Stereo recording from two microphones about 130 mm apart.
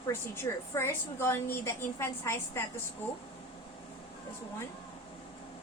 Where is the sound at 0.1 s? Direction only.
20° left (ahead or behind).